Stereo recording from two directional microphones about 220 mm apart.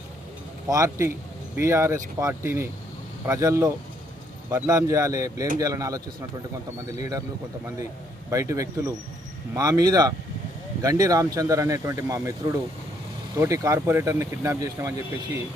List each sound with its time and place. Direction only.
0.7 s speech: 15° right (ahead or behind)
7.0 s speech: 15° right (ahead or behind)
8.3 s speech: 15° right (ahead or behind)